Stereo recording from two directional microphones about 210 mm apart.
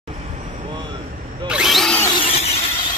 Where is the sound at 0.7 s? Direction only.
25° right (ahead or behind).